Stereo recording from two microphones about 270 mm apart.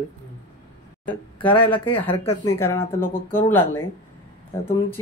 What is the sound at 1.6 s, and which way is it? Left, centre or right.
Speech, centre.